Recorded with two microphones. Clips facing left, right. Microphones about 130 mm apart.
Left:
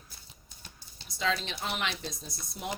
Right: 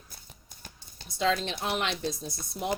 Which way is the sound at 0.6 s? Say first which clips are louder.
Right 3 dB; 50° right (ahead or behind).